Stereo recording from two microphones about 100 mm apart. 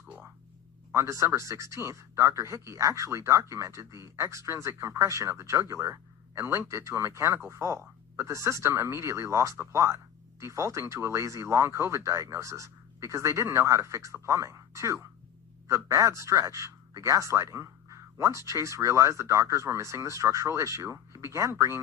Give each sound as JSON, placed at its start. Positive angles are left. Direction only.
{"t": 0.9, "sound": "a man's voice", "side_deg": -30}